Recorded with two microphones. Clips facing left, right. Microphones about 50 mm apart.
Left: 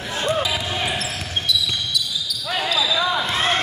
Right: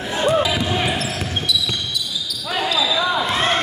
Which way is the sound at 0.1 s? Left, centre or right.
Centre.